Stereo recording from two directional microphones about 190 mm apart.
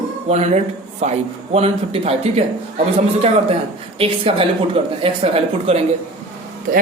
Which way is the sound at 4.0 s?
30° right (ahead or behind).